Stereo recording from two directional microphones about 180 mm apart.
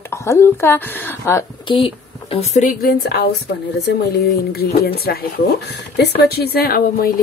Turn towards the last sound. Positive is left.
turn(degrees=55)  # may be behind; listen again after turning